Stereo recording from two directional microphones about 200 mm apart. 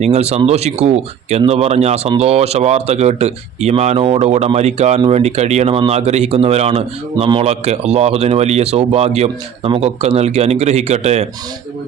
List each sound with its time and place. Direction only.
0.0 s speech: 30° right (ahead or behind)